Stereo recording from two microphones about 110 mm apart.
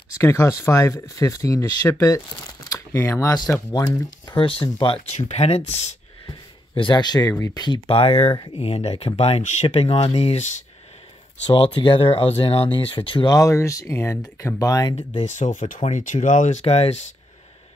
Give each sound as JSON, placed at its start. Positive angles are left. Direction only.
{"t": 0.1, "sound": "speech", "side_deg": 30}
{"t": 4.4, "sound": "speech", "side_deg": 55}
{"t": 5.1, "sound": "speech", "side_deg": 80}
{"t": 6.7, "sound": "speech", "side_deg": 45}
{"t": 7.2, "sound": "speech", "side_deg": 30}
{"t": 11.5, "sound": "speech", "side_deg": 55}
{"t": 12.7, "sound": "speech", "side_deg": 50}
{"t": 13.3, "sound": "speech", "side_deg": 30}
{"t": 15.0, "sound": "speech", "side_deg": 85}